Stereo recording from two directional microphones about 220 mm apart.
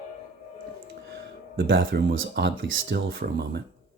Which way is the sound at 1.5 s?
55° right (ahead or behind).